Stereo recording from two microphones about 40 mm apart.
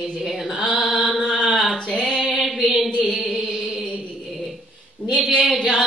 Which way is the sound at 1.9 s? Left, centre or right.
Centre.